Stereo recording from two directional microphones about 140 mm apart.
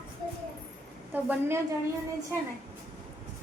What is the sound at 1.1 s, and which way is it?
Speech, 15° right (ahead or behind).